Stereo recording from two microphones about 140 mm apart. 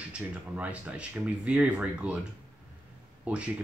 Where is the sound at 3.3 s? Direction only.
10° right (ahead or behind).